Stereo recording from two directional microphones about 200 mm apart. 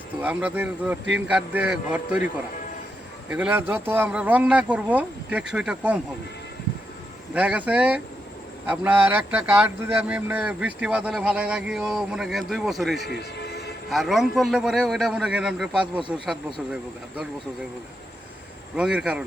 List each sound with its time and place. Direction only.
0.2 s speech: 10° right (ahead or behind)
7.3 s speech: 5° right (ahead or behind)
13.1 s a sound: 55° left (ahead or behind)
13.9 s speech: centre (ahead or behind)
18.8 s speech: 5° right (ahead or behind)